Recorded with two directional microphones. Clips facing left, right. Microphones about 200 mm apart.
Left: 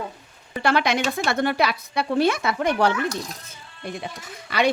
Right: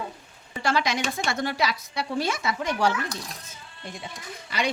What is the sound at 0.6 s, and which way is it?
A woman's voice, 60° left (ahead or behind).